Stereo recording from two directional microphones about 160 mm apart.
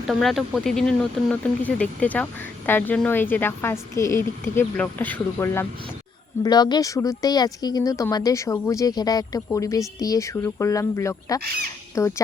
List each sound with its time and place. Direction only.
0.1 s speech: centre (ahead or behind)
6.4 s speech: 25° left (ahead or behind)